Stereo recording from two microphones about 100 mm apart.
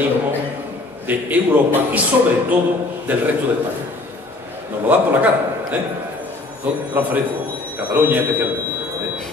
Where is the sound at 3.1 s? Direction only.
15° right (ahead or behind).